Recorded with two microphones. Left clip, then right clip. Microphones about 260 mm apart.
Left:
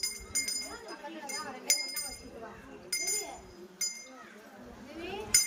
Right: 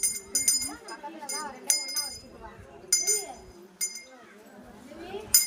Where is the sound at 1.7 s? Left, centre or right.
Right.